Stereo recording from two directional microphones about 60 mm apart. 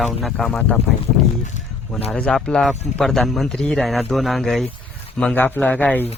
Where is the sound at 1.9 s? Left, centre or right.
Centre.